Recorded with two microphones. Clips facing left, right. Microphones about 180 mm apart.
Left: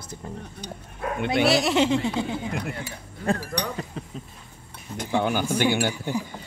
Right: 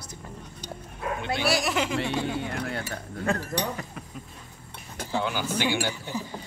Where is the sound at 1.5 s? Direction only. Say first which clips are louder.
Left 4 dB; 25° left (ahead or behind).